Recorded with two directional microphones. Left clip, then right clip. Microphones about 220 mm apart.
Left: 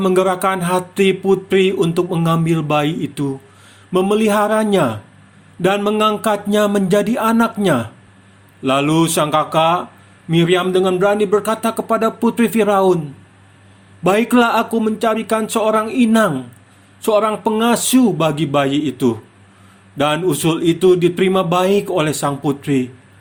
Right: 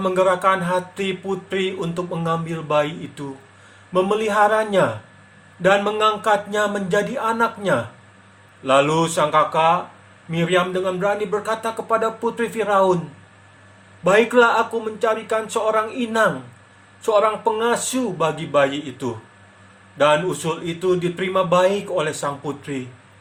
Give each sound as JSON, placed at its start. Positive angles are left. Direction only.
{"t": 0.0, "sound": "speech", "side_deg": 40}
{"t": 14.0, "sound": "speech", "side_deg": 40}